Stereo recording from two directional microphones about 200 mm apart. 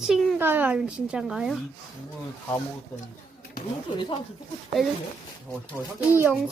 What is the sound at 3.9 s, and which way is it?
Speech, 25° left (ahead or behind).